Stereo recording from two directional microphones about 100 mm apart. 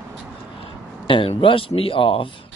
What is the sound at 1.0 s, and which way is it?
Speech, 60° left (ahead or behind).